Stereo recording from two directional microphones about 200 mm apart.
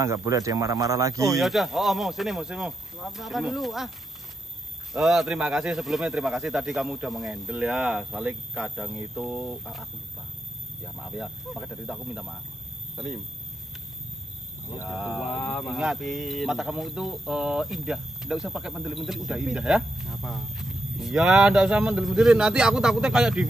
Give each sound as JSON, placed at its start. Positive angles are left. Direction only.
{"t": 0.0, "sound": "speech", "side_deg": -15}
{"t": 1.3, "sound": "speech", "side_deg": 0}
{"t": 4.9, "sound": "speech", "side_deg": 0}
{"t": 11.0, "sound": "speech", "side_deg": 0}
{"t": 14.7, "sound": "speech", "side_deg": -5}